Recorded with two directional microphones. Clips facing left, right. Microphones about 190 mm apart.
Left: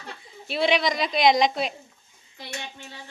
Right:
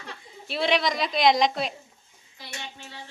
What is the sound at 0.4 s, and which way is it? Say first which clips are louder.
A woman's voice: left 2 dB; centre (ahead or behind).